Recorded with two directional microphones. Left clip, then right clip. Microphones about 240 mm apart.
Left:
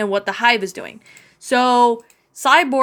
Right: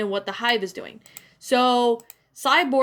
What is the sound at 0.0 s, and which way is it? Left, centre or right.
Speech, left.